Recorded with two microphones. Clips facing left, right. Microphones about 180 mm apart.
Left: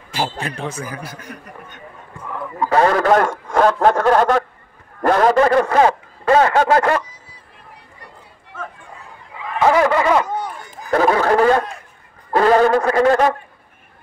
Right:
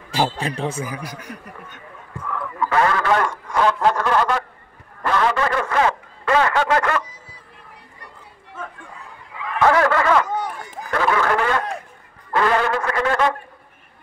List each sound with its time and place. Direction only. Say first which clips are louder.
0.4 s speech: right 1 dB; 30° right (ahead or behind)
0.8 s a man's voice: even; 15° right (ahead or behind)
2.2 s a man's voice: left 2 dB; 20° left (ahead or behind)
9.6 s snicker: left 2 dB; 15° left (ahead or behind)
10.9 s chatter: left 5 dB; 35° left (ahead or behind)
12.3 s music: left 6 dB; 35° left (ahead or behind)